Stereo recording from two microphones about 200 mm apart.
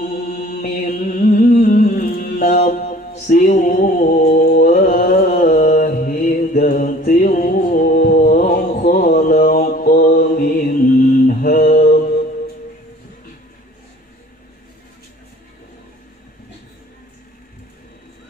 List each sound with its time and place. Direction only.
0.1 s chant: 40° left (ahead or behind)